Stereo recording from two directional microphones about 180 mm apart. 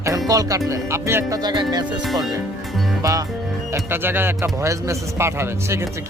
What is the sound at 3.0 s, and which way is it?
Speech, 20° right (ahead or behind).